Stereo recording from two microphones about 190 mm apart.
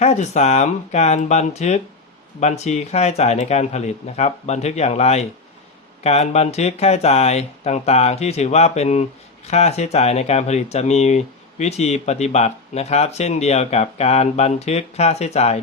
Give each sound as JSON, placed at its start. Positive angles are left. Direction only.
{"t": 0.0, "sound": "speech", "side_deg": 35}